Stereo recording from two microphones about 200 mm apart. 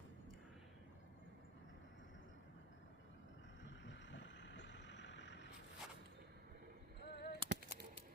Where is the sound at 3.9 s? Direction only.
65° left (ahead or behind).